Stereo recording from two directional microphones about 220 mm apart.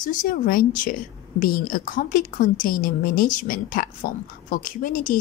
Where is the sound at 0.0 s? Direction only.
35° left (ahead or behind).